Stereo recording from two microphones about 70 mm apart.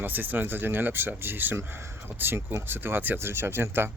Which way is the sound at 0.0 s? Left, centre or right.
Right.